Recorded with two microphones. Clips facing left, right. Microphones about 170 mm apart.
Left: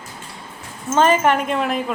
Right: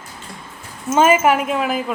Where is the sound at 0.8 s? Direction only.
10° right (ahead or behind).